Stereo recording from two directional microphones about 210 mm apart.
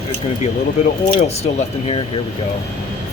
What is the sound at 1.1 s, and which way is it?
Speech, 30° left (ahead or behind).